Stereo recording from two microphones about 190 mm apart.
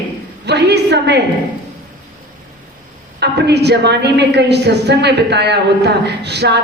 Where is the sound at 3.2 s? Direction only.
60° right (ahead or behind).